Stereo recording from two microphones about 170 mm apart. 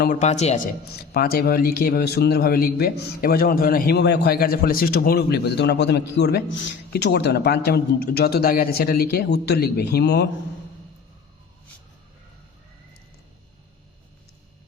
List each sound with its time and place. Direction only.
0.2 s a man's voice: 40° left (ahead or behind)
1.1 s a man's voice: 65° left (ahead or behind)